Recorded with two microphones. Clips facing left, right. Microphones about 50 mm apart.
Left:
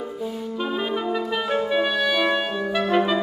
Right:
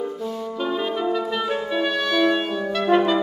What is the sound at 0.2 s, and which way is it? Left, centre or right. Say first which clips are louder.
Music: right 1 dB; centre.